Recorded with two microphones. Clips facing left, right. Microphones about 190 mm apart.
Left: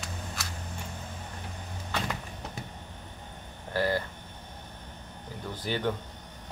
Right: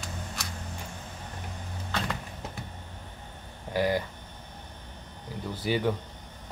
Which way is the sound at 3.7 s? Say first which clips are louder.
Right 2 dB; 15° right (ahead or behind).